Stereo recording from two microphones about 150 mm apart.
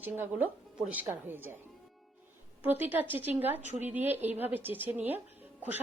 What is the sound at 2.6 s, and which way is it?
Speech, 10° right (ahead or behind).